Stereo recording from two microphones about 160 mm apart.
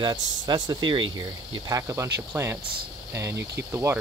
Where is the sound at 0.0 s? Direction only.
30° right (ahead or behind).